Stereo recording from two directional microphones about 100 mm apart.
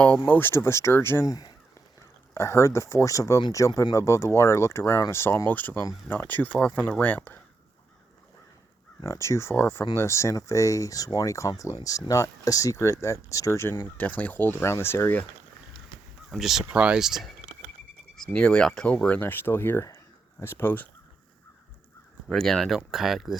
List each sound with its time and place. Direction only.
0.3 s speech: 20° left (ahead or behind); by 1.5 s 40° left (ahead or behind)
2.3 s speech: 25° left (ahead or behind)
9.0 s speech: 30° left (ahead or behind)
13.9 s speech: 15° left (ahead or behind)
16.3 s speech: centre (ahead or behind)
18.3 s speech: 10° left (ahead or behind)
22.3 s speech: 5° left (ahead or behind)